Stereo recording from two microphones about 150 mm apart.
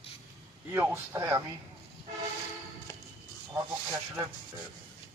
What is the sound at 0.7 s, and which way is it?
Speech, 15° right (ahead or behind).